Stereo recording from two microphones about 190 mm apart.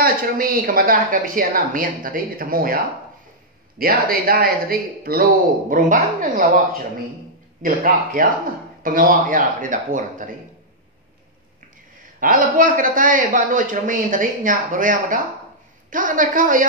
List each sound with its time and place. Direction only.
0.0 s speech: 50° right (ahead or behind)
12.2 s speech: 45° right (ahead or behind)